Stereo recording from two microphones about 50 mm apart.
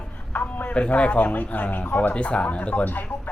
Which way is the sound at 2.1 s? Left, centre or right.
Left.